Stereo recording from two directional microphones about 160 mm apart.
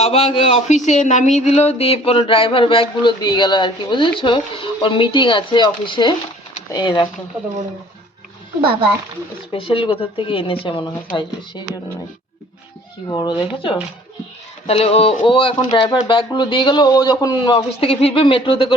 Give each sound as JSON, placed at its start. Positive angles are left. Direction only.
{"t": 0.0, "sound": "speech", "side_deg": 35}
{"t": 0.9, "sound": "speech", "side_deg": 50}
{"t": 9.5, "sound": "speech", "side_deg": 35}
{"t": 13.1, "sound": "speech", "side_deg": 25}